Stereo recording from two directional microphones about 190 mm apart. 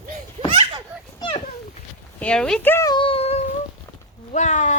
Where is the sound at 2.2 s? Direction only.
5° left (ahead or behind); by 4.7 s 40° left (ahead or behind).